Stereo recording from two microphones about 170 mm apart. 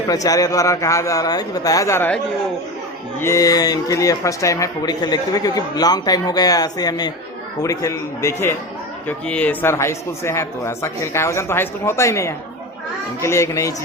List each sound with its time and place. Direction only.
0.1 s speech: 20° left (ahead or behind)
3.2 s a man's voice: 15° left (ahead or behind)